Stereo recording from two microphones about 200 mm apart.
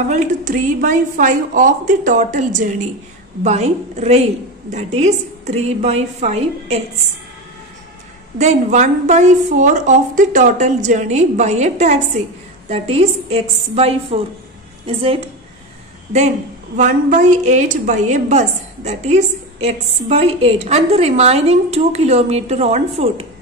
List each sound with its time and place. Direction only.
0.1 s a woman's voice: 40° right (ahead or behind)
8.4 s a woman's voice: 35° right (ahead or behind)
16.7 s a woman's voice: 40° right (ahead or behind)